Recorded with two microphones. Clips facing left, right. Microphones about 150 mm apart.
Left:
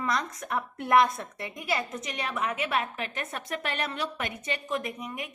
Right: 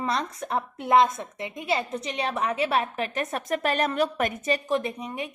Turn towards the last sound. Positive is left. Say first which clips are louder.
# right 4 dB
turn(degrees=-30)  # may be behind; listen again after turning